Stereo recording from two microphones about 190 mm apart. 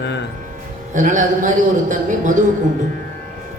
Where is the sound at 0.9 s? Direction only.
40° right (ahead or behind).